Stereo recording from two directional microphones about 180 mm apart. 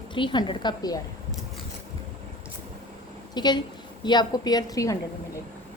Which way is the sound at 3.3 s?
25° left (ahead or behind).